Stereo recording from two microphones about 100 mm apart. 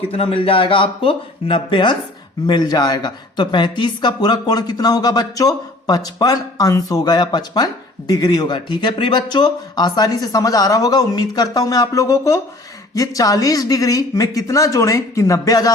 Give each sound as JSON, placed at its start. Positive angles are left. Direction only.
{"t": 0.1, "sound": "speech", "side_deg": 70}